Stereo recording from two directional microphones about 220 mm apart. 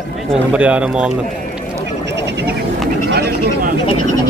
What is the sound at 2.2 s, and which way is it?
Speech, 50° right (ahead or behind).